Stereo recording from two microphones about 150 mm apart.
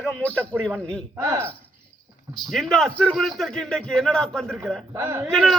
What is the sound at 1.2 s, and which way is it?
Speech, 20° right (ahead or behind).